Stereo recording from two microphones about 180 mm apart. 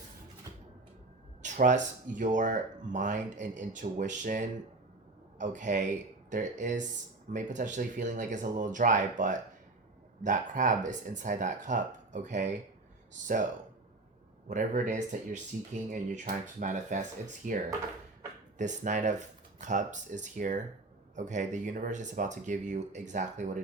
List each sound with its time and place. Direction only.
1.4 s speech: 45° right (ahead or behind)
14.4 s speech: 45° right (ahead or behind)